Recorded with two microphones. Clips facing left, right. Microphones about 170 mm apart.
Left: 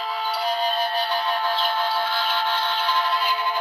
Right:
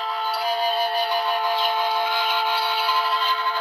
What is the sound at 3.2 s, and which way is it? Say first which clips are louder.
Music: left 1 dB; 15° left (ahead or behind).